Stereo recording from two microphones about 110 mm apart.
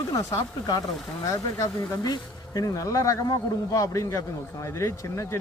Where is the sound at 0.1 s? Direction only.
35° left (ahead or behind).